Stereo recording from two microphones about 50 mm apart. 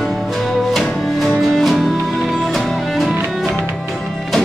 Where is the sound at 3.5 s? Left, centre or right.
Right.